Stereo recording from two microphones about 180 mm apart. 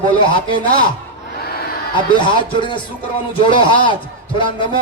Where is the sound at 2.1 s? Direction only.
25° left (ahead or behind).